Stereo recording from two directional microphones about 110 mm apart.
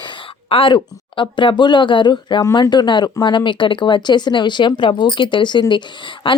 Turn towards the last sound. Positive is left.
turn(degrees=50)  # may be behind; listen again after turning